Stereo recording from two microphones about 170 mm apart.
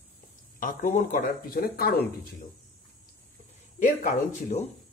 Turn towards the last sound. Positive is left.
turn(degrees=50)  # may be behind; listen again after turning